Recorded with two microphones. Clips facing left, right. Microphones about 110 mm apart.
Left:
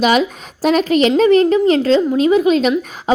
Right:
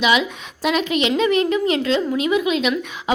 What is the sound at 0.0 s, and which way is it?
A woman's voice, 40° left (ahead or behind).